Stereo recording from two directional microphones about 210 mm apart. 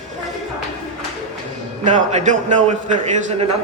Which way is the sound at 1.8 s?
35° right (ahead or behind).